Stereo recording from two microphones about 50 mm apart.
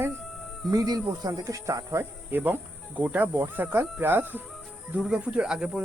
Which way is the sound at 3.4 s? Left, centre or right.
Right.